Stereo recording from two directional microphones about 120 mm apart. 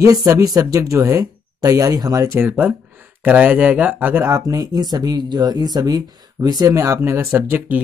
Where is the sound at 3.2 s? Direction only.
15° right (ahead or behind).